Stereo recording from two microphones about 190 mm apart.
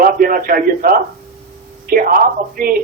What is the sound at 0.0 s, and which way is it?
A man's voice, 50° right (ahead or behind).